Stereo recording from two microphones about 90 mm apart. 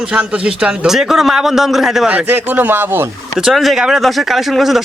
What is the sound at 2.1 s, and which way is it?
Speech, 20° right (ahead or behind).